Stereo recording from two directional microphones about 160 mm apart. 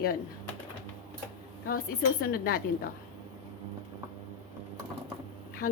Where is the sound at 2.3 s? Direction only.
70° left (ahead or behind).